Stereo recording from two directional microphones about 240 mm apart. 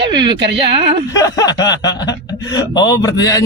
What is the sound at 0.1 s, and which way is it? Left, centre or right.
Speech, centre.